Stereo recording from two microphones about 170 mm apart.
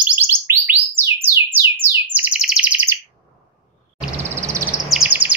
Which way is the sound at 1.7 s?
10° right (ahead or behind).